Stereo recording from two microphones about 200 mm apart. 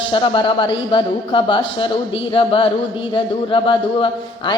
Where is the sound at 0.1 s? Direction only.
25° left (ahead or behind).